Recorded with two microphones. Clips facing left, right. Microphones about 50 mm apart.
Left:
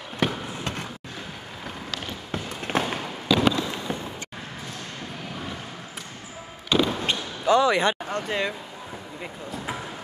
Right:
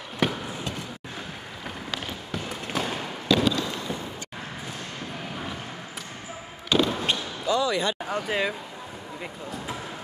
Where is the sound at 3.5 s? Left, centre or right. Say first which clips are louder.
Left 1 dB; left.